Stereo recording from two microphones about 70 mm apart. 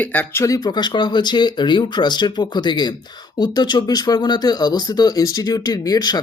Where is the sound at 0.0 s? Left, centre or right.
Left.